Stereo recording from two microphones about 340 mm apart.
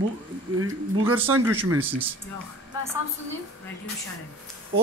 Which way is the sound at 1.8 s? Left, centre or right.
Centre.